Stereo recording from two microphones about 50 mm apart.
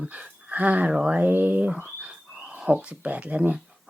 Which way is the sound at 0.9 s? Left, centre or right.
Centre.